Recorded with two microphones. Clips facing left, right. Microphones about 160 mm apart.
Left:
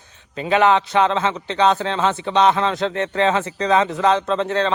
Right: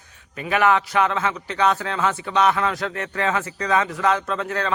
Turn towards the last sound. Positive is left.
turn(degrees=25)  # may be behind; listen again after turning